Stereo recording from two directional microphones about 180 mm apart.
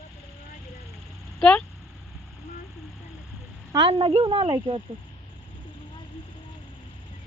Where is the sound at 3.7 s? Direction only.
30° right (ahead or behind).